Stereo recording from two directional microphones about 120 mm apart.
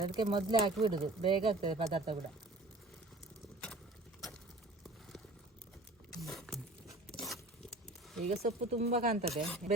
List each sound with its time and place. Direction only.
0.0 s speech: 45° right (ahead or behind)
6.2 s a sound: centre (ahead or behind)
8.3 s speech: 65° right (ahead or behind)
9.6 s speech: 90° right